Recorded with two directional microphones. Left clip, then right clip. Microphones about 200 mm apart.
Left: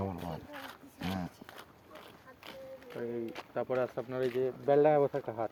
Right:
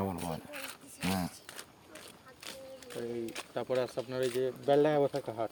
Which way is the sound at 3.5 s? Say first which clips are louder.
Even; 20° right (ahead or behind).